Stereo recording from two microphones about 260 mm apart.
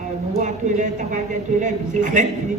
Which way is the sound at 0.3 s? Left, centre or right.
Right.